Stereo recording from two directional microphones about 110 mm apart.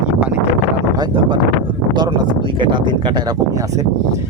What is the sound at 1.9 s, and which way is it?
Speech, 40° right (ahead or behind).